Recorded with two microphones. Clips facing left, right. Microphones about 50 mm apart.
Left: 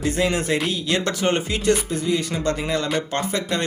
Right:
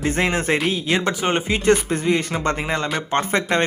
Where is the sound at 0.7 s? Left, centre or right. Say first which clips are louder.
Right 2 dB; right.